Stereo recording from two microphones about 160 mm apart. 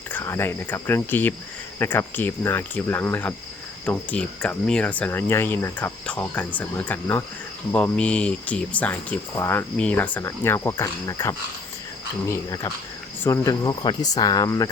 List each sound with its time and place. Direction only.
0.1 s speech: 15° left (ahead or behind)